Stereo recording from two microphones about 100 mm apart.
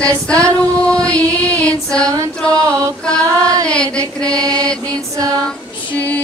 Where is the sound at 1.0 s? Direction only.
10° left (ahead or behind).